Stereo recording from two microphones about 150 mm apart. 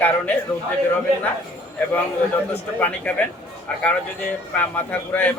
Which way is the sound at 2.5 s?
10° left (ahead or behind).